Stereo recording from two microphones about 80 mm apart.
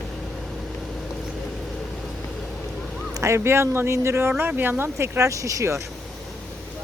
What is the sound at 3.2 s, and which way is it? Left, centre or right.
Speech, right.